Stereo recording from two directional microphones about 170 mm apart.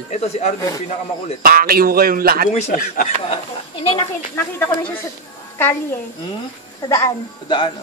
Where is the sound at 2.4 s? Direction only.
55° left (ahead or behind).